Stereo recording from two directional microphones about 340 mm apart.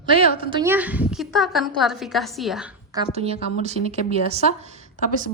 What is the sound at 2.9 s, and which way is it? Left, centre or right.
A woman's voice, centre.